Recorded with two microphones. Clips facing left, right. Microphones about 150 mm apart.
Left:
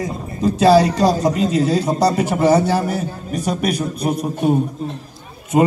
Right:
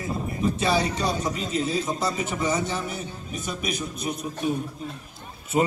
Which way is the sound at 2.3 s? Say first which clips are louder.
Left 13 dB; 65° left (ahead or behind).